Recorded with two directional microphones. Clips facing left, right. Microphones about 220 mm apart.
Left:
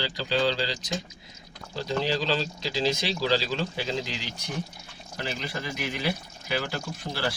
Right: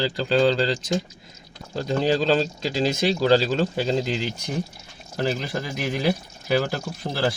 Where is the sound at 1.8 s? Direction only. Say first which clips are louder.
Right 6 dB; 45° right (ahead or behind).